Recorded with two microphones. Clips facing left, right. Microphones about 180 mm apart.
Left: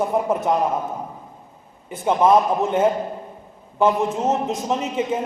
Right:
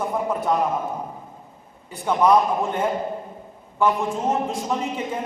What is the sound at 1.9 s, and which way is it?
A man's voice, 25° left (ahead or behind).